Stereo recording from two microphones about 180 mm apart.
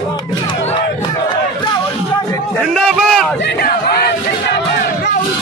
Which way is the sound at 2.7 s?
Centre (ahead or behind).